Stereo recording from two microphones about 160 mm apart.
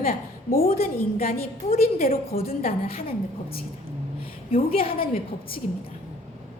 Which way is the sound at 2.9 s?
35° left (ahead or behind).